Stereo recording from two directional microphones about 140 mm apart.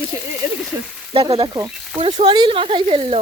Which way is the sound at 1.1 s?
35° right (ahead or behind).